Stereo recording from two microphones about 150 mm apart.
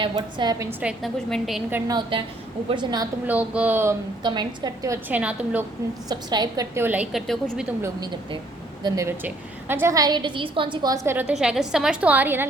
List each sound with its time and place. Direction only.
0.0 s a woman's voice: 30° right (ahead or behind)
0.7 s a woman's voice: 5° right (ahead or behind)
1.9 s a woman's voice: 30° right (ahead or behind)
3.2 s a woman's voice: 10° right (ahead or behind)
4.2 s a woman's voice: 30° right (ahead or behind); by 5.6 s 10° right (ahead or behind)
6.1 s a woman's voice: 25° right (ahead or behind)
6.7 s a woman's voice: 10° right (ahead or behind)
8.8 s a woman's voice: 20° right (ahead or behind)